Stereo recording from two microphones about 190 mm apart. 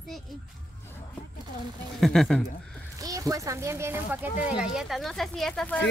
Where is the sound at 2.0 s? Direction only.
Centre (ahead or behind).